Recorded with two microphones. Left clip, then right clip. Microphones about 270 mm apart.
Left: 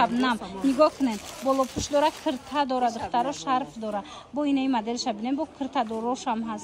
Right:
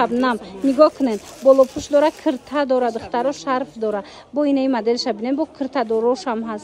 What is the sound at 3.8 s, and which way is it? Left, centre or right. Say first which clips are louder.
Speech: right 8 dB; right.